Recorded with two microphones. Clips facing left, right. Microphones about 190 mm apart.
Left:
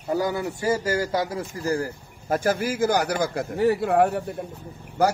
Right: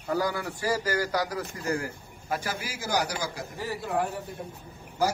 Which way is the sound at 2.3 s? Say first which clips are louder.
Left 10 dB; 50° left (ahead or behind).